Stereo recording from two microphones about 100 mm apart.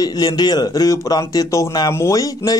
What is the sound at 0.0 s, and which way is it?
Speech, 45° left (ahead or behind).